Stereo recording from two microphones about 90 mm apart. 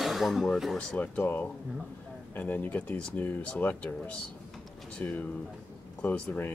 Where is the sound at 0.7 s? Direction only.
15° left (ahead or behind).